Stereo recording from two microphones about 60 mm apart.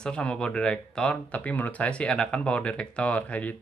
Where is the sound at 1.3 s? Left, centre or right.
Left.